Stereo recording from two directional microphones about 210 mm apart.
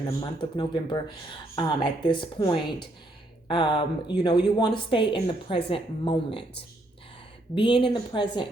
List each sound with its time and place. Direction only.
0.2 s a woman's voice: 20° left (ahead or behind)
7.5 s a woman's voice: 25° left (ahead or behind)